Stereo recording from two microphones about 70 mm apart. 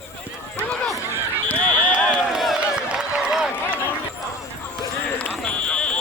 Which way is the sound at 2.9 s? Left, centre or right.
Centre.